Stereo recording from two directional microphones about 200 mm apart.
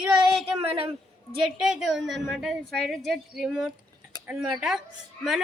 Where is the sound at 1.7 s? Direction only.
Centre (ahead or behind).